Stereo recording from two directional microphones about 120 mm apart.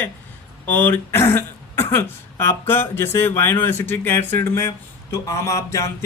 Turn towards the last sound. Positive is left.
turn(degrees=25)  # may be behind; listen again after turning